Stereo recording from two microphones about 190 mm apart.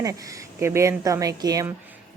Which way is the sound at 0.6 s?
15° right (ahead or behind).